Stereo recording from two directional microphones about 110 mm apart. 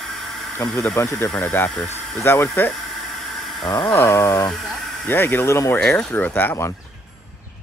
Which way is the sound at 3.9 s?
20° left (ahead or behind).